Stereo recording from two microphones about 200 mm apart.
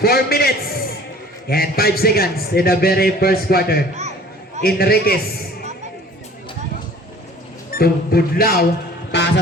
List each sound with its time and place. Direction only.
0.0 s a sound: 50° left (ahead or behind)
1.5 s a man's voice: 50° left (ahead or behind)
7.8 s a man's voice: 50° left (ahead or behind)
9.1 s music: 60° left (ahead or behind)